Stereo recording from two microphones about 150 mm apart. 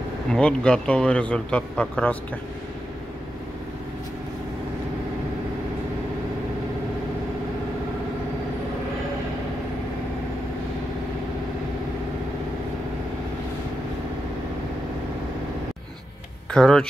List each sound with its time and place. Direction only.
0.3 s speech: 5° left (ahead or behind)
16.5 s speech: 5° left (ahead or behind)